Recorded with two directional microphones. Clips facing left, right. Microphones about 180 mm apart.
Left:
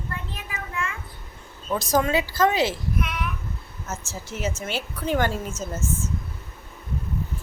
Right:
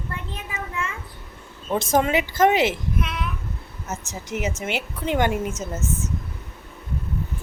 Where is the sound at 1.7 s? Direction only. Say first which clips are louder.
Right 2 dB; 25° right (ahead or behind).